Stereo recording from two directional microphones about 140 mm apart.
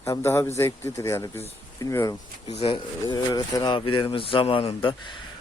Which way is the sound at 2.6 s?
35° left (ahead or behind).